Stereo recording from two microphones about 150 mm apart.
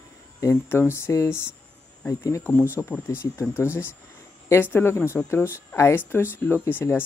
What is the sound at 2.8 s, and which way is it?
Speech, 10° left (ahead or behind).